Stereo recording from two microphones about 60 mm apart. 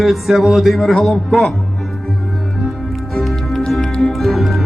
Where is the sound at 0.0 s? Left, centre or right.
Centre.